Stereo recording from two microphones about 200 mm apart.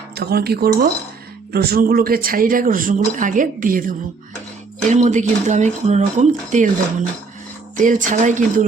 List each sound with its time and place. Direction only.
0.1 s speech: 55° right (ahead or behind)
7.8 s speech: 40° right (ahead or behind)